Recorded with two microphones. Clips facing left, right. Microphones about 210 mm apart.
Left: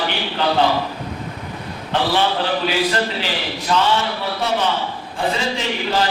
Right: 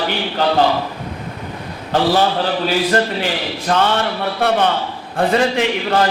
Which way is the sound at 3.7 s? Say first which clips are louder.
Right 2 dB; 50° right (ahead or behind).